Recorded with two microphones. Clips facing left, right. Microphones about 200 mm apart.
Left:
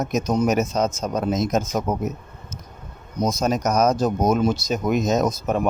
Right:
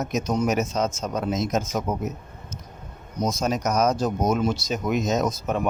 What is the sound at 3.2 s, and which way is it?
Speech, 40° left (ahead or behind).